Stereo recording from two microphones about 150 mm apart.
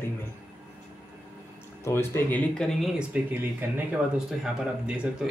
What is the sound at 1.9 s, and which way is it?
Speech, 15° left (ahead or behind).